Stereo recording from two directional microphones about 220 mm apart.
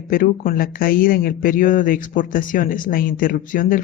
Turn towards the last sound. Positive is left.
turn(degrees=40)  # may be behind; listen again after turning